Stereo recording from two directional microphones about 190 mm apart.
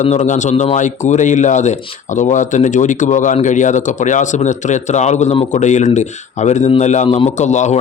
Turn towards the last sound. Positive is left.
turn(degrees=40)  # may be behind; listen again after turning